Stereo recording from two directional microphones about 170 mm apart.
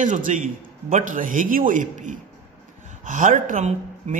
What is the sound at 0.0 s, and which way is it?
Speech, 50° right (ahead or behind).